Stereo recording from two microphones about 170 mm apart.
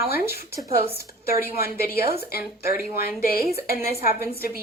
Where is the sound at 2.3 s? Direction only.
65° left (ahead or behind).